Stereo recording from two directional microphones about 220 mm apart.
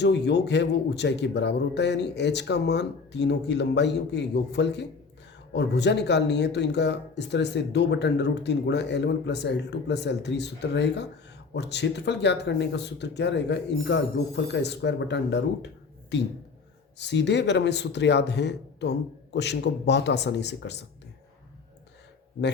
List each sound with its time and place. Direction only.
0.0 s speech: 50° left (ahead or behind)